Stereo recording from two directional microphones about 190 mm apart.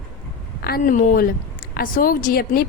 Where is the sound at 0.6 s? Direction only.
50° left (ahead or behind).